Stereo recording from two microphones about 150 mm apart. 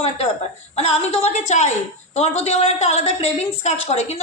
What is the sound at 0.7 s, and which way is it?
A woman's voice, 45° left (ahead or behind).